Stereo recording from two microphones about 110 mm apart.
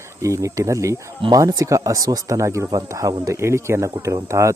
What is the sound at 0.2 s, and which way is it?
Speech, 30° right (ahead or behind).